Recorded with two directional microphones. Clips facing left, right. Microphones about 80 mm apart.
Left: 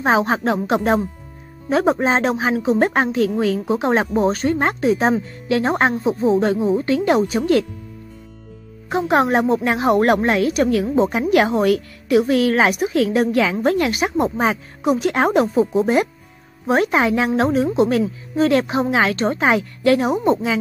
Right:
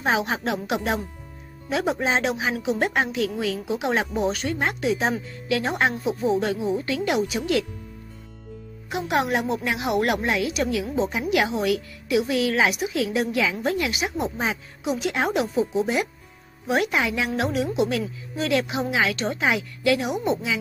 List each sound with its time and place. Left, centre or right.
0.0 s a woman's voice: left
8.8 s a woman's voice: left